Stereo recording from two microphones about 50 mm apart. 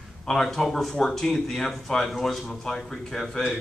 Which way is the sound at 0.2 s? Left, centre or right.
Centre.